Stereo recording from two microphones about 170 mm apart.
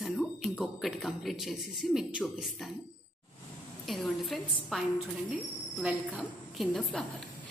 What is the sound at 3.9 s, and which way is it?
Speech, centre (ahead or behind).